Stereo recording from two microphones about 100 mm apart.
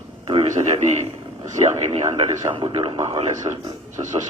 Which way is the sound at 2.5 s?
55° right (ahead or behind).